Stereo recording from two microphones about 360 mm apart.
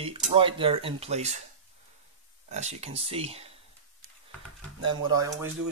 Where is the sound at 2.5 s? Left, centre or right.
Centre.